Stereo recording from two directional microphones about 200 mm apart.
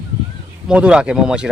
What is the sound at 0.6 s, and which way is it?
Speech, 5° right (ahead or behind).